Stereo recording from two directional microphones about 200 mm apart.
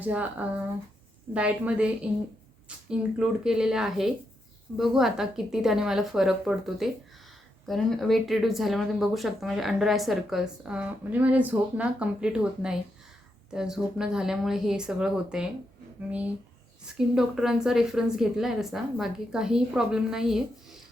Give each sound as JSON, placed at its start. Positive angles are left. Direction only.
{"t": 0.0, "sound": "a woman's voice", "side_deg": -10}
{"t": 3.2, "sound": "speech", "side_deg": -5}
{"t": 17.0, "sound": "speech", "side_deg": -5}